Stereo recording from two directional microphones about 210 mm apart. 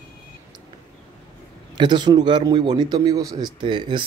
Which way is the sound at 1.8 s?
20° right (ahead or behind).